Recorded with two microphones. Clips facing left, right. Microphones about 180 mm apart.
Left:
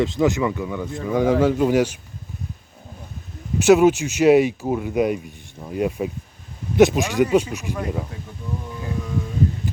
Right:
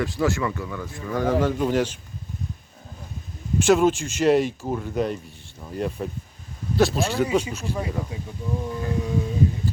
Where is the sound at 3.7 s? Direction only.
5° left (ahead or behind).